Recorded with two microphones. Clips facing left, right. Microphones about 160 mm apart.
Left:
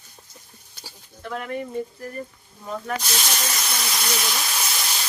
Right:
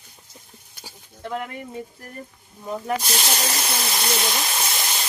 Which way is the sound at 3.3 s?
30° right (ahead or behind).